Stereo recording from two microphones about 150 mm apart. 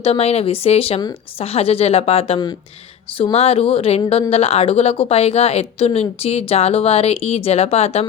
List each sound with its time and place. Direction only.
0.0 s a woman's voice: 40° left (ahead or behind)